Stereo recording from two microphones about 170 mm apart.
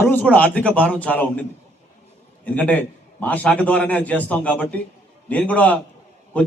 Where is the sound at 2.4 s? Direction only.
10° left (ahead or behind).